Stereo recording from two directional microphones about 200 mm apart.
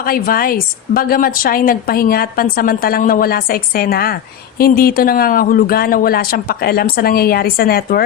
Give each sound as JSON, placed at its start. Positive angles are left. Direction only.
{"t": 0.0, "sound": "a woman's voice", "side_deg": 45}